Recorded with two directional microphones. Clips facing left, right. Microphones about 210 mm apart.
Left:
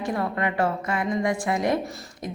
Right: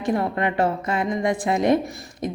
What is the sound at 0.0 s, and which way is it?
A woman's voice, 25° right (ahead or behind).